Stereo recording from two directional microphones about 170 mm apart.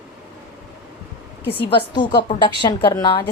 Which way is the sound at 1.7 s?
25° left (ahead or behind).